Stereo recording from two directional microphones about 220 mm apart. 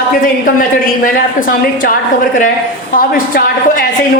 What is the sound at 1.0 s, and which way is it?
A woman's voice, 40° left (ahead or behind).